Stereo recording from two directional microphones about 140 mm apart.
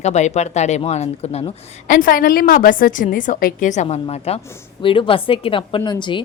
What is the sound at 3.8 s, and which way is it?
A woman's voice, 50° left (ahead or behind).